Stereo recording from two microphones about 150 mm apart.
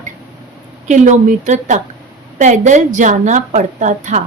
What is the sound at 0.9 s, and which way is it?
A woman's voice, 55° right (ahead or behind).